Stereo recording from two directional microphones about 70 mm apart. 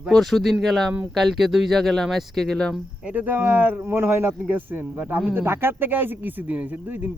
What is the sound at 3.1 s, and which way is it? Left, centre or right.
A man's voice, right.